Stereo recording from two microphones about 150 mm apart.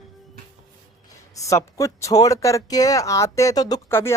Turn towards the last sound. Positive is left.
turn(degrees=15)  # may be behind; listen again after turning